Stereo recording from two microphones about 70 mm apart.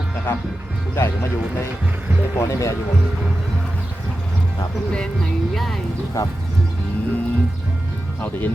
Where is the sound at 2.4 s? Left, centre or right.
Left.